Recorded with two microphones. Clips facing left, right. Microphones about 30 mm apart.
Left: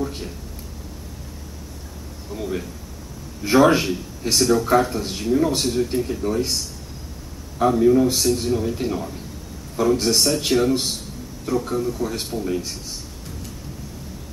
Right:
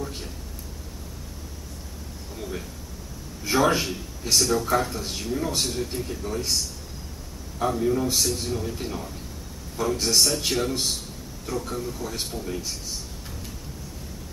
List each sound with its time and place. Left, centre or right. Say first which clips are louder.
0.0 s a sound: left 6 dB; centre
2.3 s a man's voice: left 7 dB; centre
7.5 s speech: left 8 dB; centre